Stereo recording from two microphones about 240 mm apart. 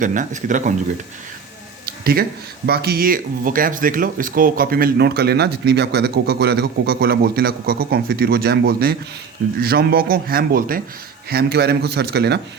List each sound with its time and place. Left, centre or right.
0.0 s speech: right
2.6 s speech: right